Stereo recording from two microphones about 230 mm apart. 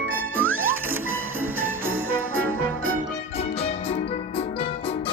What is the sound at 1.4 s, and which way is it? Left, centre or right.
Music, right.